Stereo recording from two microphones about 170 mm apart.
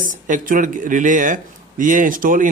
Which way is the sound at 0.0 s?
50° right (ahead or behind).